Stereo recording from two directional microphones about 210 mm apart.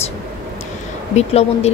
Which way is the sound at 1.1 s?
30° left (ahead or behind).